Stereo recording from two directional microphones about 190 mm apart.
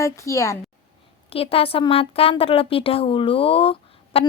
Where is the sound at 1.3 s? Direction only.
30° left (ahead or behind).